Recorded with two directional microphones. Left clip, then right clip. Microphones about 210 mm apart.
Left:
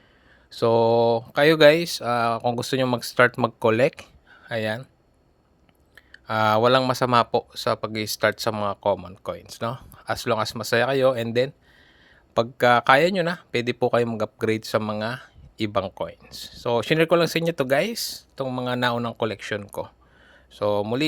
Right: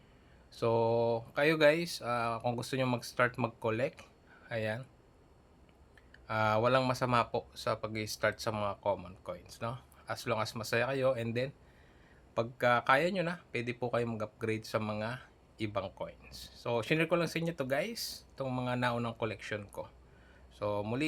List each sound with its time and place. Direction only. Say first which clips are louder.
0.5 s speech: left 11 dB; 40° left (ahead or behind)
5.9 s speech: left 10 dB; 45° left (ahead or behind)